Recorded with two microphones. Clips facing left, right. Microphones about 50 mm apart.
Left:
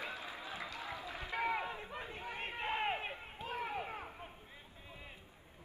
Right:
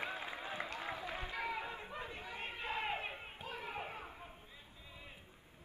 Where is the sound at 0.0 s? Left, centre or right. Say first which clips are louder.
Right 2 dB; right.